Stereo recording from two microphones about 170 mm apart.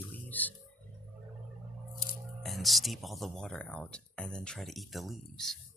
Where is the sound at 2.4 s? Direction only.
Centre (ahead or behind).